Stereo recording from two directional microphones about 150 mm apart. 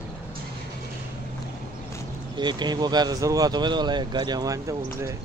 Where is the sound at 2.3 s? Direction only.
30° right (ahead or behind).